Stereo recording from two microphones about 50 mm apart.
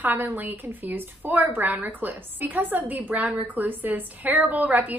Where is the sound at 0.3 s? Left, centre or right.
Right.